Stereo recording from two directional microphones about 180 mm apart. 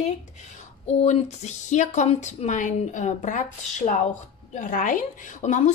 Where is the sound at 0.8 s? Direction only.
40° left (ahead or behind).